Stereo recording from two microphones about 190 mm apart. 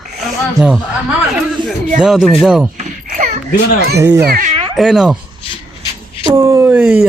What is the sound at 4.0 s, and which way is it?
Speech, 15° right (ahead or behind).